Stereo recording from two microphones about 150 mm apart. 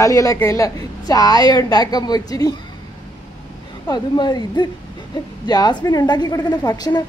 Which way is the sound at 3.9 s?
25° left (ahead or behind).